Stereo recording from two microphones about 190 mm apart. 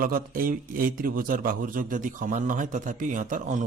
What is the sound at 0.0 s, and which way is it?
Speech, 50° right (ahead or behind).